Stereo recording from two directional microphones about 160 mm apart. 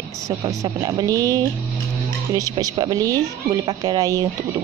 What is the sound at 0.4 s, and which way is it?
Speech, 20° right (ahead or behind).